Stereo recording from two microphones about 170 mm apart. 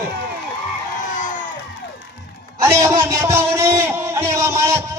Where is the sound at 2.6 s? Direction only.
15° right (ahead or behind).